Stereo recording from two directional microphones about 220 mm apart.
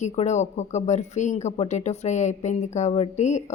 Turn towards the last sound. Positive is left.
turn(degrees=30)  # may be behind; listen again after turning